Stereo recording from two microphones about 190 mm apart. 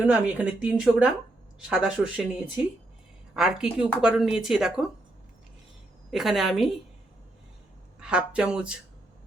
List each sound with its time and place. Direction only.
0.0 s speech: 5° right (ahead or behind)
3.3 s speech: 5° right (ahead or behind)
6.1 s speech: centre (ahead or behind)
7.9 s speech: 5° right (ahead or behind)